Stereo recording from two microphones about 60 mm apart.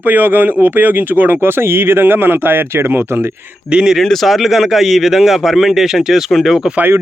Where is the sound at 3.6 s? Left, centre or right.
Centre.